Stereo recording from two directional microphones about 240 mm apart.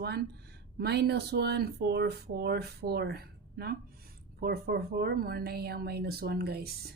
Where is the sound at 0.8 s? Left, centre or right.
Right.